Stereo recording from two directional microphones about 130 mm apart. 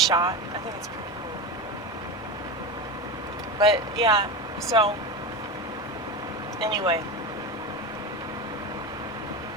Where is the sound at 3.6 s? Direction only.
35° right (ahead or behind).